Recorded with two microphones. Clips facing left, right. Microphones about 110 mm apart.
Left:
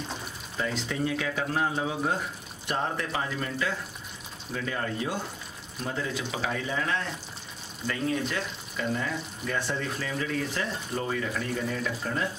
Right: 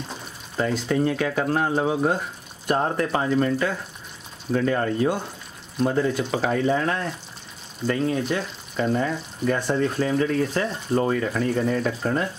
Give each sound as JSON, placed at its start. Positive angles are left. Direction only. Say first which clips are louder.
{"t": 0.6, "sound": "speech", "louder": "right 8 dB", "side_deg": -45}